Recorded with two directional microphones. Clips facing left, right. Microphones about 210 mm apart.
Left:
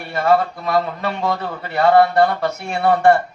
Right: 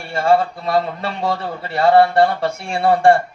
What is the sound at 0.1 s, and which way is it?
Speech, 30° right (ahead or behind).